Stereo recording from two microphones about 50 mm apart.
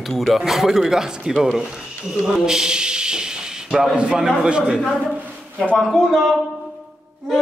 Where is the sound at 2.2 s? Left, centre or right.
Centre.